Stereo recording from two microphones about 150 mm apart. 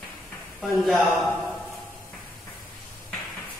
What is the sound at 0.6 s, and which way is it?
Speech, centre (ahead or behind).